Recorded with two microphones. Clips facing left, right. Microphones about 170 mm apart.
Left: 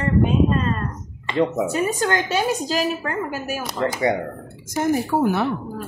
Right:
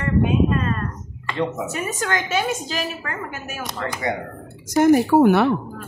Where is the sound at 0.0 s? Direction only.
30° left (ahead or behind).